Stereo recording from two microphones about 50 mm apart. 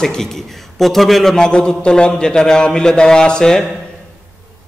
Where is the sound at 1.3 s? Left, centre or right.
Centre.